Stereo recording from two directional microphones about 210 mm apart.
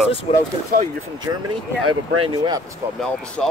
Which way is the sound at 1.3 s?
15° right (ahead or behind).